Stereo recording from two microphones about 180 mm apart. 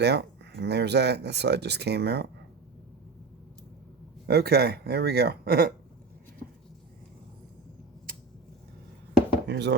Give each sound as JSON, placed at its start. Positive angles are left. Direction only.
{"t": 0.0, "sound": "speech", "side_deg": -70}
{"t": 4.3, "sound": "speech", "side_deg": -65}
{"t": 9.5, "sound": "speech", "side_deg": -70}